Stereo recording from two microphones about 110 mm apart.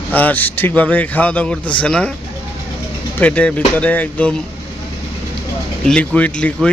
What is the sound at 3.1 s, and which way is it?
A man's voice, 10° left (ahead or behind).